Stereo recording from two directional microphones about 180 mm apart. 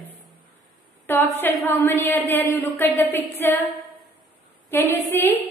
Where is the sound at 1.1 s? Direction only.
10° left (ahead or behind).